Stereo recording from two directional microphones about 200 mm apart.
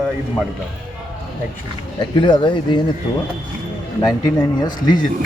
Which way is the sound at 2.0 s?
25° left (ahead or behind).